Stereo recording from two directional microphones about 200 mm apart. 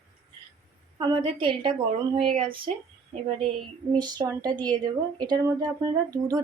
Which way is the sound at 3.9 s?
20° right (ahead or behind).